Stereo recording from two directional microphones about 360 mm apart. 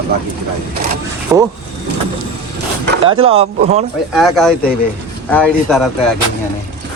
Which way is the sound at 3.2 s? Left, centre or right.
Centre.